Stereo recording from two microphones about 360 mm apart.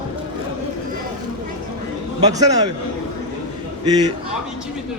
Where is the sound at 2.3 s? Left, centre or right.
Centre.